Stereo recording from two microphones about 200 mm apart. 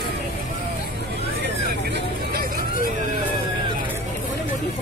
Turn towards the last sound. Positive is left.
turn(degrees=-45)  # may be behind; listen again after turning